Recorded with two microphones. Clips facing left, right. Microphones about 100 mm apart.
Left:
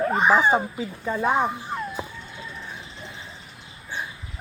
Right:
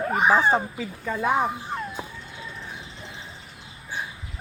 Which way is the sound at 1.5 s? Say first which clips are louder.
Left 1 dB; centre (ahead or behind).